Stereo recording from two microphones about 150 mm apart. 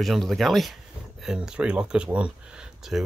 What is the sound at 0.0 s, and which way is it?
Speech, centre (ahead or behind).